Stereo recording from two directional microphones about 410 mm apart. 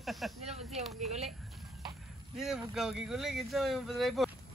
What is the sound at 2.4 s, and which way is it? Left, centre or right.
Speech, centre.